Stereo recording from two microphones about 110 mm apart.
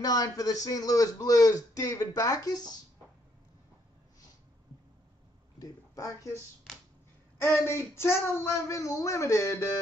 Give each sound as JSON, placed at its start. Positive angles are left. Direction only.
{"t": 0.0, "sound": "a man's voice", "side_deg": 35}
{"t": 5.6, "sound": "speech", "side_deg": 30}
{"t": 7.3, "sound": "speech", "side_deg": 20}